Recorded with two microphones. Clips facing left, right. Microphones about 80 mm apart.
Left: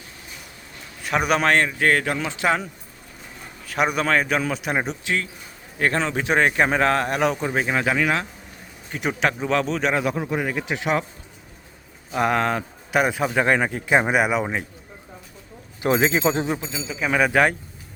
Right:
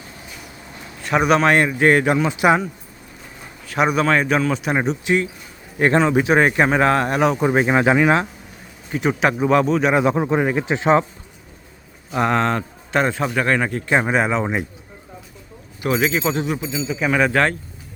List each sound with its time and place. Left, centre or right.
1.0 s a man's voice: centre
1.5 s a man's voice: centre
3.7 s a man's voice: centre
5.0 s a man's voice: right; by 7.4 s centre
7.4 s speech: right
8.9 s a man's voice: centre
9.4 s a man's voice: centre
9.9 s speech: right
12.1 s a man's voice: centre
15.8 s a man's voice: left
16.7 s a man's voice: centre